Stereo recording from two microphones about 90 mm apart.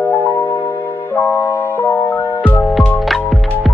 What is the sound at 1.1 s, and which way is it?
Music, 20° left (ahead or behind).